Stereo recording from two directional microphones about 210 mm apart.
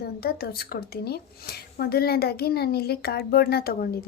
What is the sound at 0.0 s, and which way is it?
A woman's voice, 45° left (ahead or behind).